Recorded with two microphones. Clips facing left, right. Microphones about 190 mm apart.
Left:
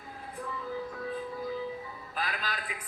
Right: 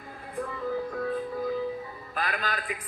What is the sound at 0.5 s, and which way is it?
Music, 60° right (ahead or behind).